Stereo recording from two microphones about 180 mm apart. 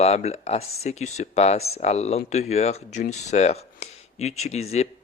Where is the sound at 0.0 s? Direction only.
35° left (ahead or behind).